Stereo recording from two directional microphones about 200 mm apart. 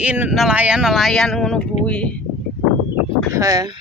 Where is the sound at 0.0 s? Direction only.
5° right (ahead or behind).